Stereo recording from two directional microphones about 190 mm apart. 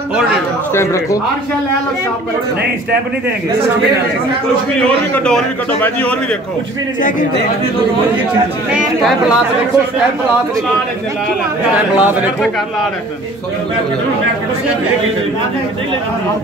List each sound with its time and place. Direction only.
0.7 s speech: 15° left (ahead or behind)
4.7 s a man's voice: 5° left (ahead or behind)
7.0 s a man's voice: 45° left (ahead or behind)
11.7 s speech: 5° right (ahead or behind)